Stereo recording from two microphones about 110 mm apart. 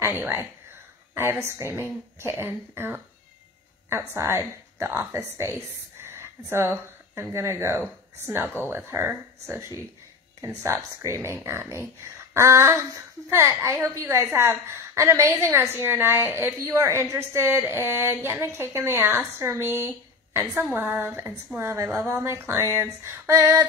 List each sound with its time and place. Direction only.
0.0 s a woman's voice: 25° right (ahead or behind)